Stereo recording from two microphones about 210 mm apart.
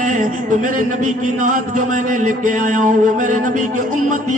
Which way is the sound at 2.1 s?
35° right (ahead or behind).